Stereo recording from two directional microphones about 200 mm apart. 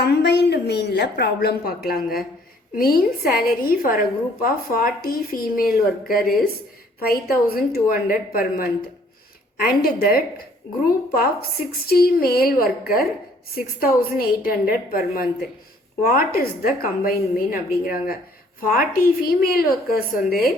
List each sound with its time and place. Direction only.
0.0 s a woman's voice: 55° left (ahead or behind)